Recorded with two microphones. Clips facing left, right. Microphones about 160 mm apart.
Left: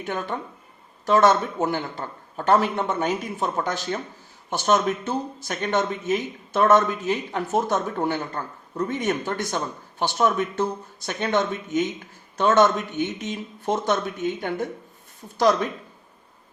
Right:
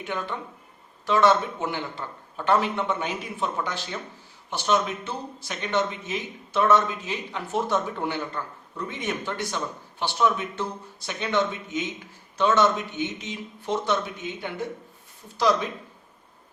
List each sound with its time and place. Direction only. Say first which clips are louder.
0.0 s speech: left 3 dB; 45° left (ahead or behind)